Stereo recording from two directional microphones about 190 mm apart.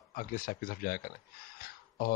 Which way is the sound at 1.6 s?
50° left (ahead or behind).